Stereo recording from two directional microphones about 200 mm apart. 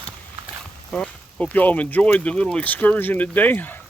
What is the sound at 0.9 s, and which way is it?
Speech, 5° left (ahead or behind).